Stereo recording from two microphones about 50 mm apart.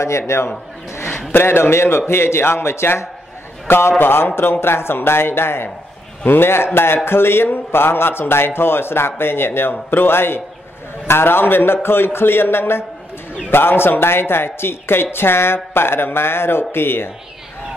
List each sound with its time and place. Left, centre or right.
0.3 s a man's voice: left
1.3 s a man's voice: left
3.6 s a man's voice: left